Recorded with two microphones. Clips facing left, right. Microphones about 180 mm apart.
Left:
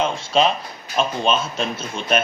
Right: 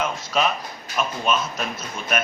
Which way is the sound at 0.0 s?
30° left (ahead or behind).